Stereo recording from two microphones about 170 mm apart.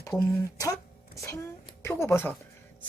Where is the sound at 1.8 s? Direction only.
15° left (ahead or behind).